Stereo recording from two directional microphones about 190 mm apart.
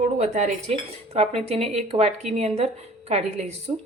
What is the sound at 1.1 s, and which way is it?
Speech, 30° right (ahead or behind).